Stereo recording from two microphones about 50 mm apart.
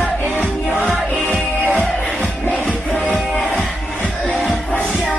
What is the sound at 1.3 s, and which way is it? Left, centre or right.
Music, right.